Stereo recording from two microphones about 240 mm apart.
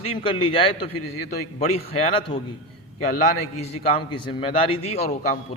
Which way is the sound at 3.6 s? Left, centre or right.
Left.